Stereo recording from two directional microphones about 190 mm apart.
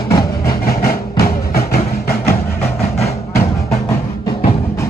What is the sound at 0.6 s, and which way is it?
Vehicle, 50° left (ahead or behind).